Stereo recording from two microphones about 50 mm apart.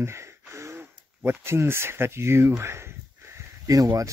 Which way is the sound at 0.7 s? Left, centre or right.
Right.